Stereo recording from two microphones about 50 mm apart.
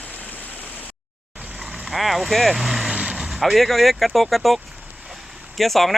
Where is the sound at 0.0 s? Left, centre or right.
Left.